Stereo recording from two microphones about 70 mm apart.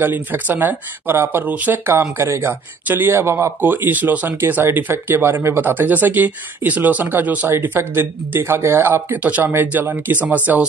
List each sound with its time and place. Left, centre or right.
0.0 s speech: right
1.9 s speech: right
3.6 s speech: right